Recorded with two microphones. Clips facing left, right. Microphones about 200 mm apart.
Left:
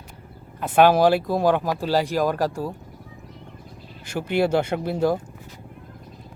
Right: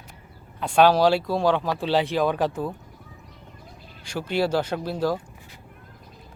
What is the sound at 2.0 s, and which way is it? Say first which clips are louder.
Speech: left 1 dB; centre (ahead or behind).